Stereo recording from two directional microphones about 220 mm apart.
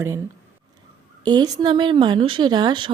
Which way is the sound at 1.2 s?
20° right (ahead or behind).